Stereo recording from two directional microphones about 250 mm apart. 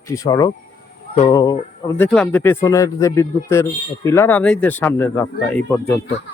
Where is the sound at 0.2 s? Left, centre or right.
Centre.